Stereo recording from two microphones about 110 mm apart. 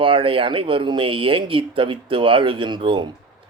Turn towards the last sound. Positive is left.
turn(degrees=-45)  # may be behind; listen again after turning